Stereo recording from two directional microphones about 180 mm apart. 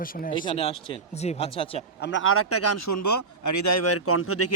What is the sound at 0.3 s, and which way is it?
Mantra, 30° left (ahead or behind).